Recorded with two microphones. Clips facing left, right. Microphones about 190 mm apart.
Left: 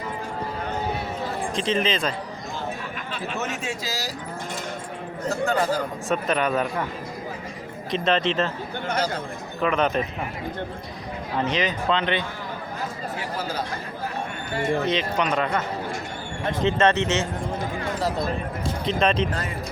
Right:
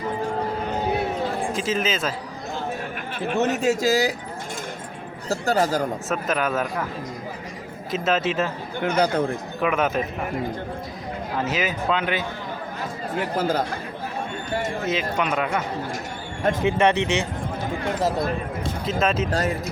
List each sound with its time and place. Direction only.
1.5 s speech: 5° right (ahead or behind)
3.3 s a man's voice: 35° right (ahead or behind); by 4.1 s 50° right (ahead or behind)
5.3 s a man's voice: 40° right (ahead or behind)
6.1 s speech: 5° right (ahead or behind)
7.9 s speech: 5° right (ahead or behind)
8.8 s speech: 60° right (ahead or behind)
9.6 s speech: 5° right (ahead or behind)
11.3 s speech: 5° right (ahead or behind)
13.1 s speech: 50° right (ahead or behind)
14.8 s speech: 5° right (ahead or behind)
16.6 s speech: 10° right (ahead or behind)
18.9 s speech: 5° right (ahead or behind)